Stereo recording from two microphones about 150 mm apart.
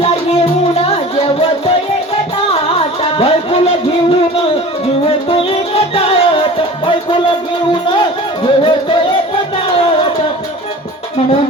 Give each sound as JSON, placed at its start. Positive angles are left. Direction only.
{"t": 0.0, "sound": "music", "side_deg": 40}
{"t": 2.7, "sound": "music", "side_deg": 40}
{"t": 5.3, "sound": "music", "side_deg": 35}